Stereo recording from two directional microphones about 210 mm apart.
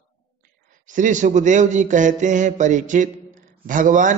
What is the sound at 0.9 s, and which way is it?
A man's voice, 35° right (ahead or behind).